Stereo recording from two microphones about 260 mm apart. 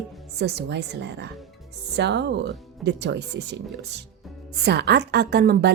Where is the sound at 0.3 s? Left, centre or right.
Right.